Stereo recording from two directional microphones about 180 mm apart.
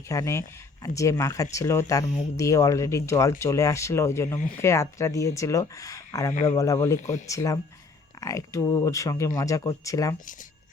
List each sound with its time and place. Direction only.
0.1 s speech: 15° left (ahead or behind)
6.3 s speech: 40° left (ahead or behind)
6.6 s speech: 15° left (ahead or behind)